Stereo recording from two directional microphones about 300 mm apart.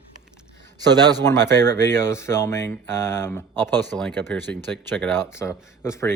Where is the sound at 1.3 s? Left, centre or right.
Centre.